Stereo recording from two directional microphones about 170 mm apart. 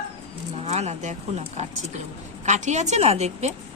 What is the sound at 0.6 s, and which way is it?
Speech, 40° right (ahead or behind).